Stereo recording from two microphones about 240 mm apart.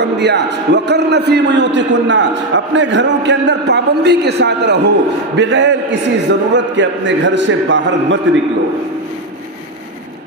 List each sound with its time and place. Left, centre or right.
0.0 s a man's voice: right